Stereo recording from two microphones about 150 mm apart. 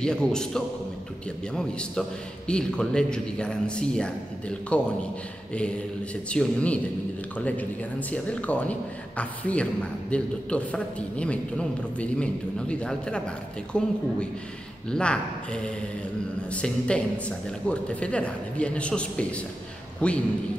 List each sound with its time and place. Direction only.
0.0 s a man's voice: 5° left (ahead or behind)
6.3 s a man's voice: 5° left (ahead or behind)